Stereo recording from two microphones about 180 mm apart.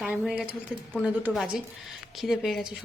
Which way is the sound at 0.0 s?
5° right (ahead or behind).